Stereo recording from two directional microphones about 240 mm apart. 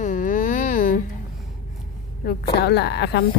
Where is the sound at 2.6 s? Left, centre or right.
Left.